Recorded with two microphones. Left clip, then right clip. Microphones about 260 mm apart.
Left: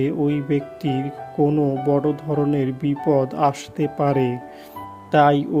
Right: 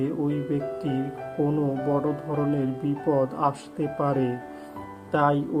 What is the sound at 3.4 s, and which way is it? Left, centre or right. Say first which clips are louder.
Speech: left 6 dB; left.